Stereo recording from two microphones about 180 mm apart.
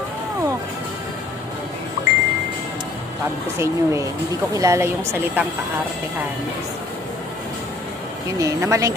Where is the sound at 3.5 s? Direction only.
15° right (ahead or behind).